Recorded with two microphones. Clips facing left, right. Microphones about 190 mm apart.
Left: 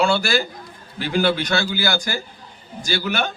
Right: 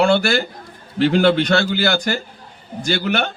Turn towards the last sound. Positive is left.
turn(degrees=-60)  # may be behind; listen again after turning